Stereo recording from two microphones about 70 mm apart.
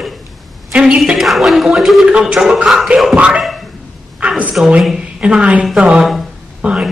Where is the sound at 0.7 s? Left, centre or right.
Centre.